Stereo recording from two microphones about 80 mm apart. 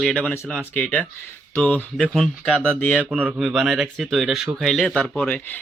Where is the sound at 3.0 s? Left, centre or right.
Centre.